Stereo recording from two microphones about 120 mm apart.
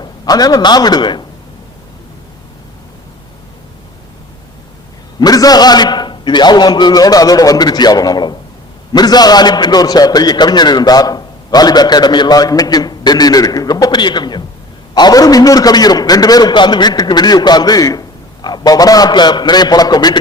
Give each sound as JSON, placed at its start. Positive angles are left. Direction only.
{"t": 0.0, "sound": "a man's voice", "side_deg": 35}
{"t": 5.2, "sound": "a man's voice", "side_deg": 30}